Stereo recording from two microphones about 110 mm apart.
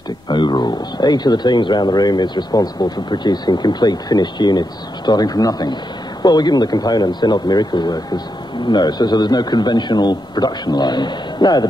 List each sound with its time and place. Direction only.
0.3 s speech: 40° left (ahead or behind)